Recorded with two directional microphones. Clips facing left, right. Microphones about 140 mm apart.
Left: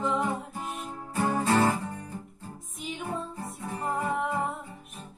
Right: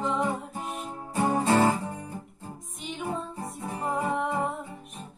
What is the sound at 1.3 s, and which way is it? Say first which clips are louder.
Music: right 2 dB; 25° right (ahead or behind).